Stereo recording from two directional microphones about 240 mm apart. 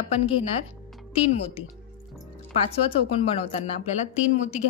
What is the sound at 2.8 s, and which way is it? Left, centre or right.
Speech, left.